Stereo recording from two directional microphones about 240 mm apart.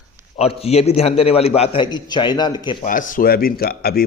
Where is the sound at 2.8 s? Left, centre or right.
Left.